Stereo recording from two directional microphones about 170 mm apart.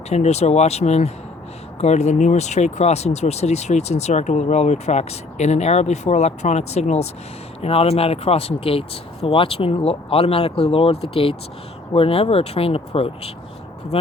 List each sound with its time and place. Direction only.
0.1 s speech: 40° left (ahead or behind)